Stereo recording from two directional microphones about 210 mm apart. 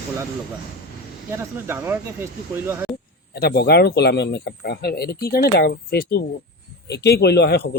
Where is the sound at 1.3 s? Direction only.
10° right (ahead or behind).